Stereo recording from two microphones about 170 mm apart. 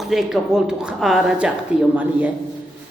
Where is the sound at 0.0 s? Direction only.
Centre (ahead or behind).